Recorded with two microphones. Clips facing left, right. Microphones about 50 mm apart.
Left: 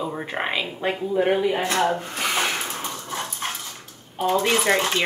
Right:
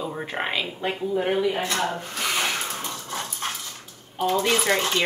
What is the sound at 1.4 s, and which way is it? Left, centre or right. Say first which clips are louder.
Speech: left 2 dB; left.